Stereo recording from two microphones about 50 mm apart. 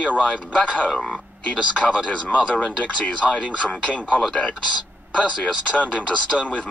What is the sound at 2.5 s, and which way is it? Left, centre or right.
Speech, centre.